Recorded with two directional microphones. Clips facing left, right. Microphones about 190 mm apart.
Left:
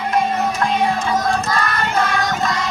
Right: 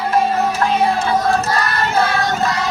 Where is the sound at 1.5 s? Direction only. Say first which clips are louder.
Right 1 dB; 35° right (ahead or behind).